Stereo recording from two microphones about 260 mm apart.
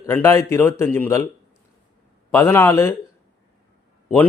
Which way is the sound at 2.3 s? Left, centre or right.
Centre.